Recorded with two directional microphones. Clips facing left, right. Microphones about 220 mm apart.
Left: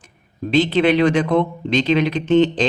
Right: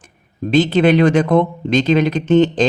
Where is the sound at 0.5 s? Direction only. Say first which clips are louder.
Right 3 dB; 45° right (ahead or behind).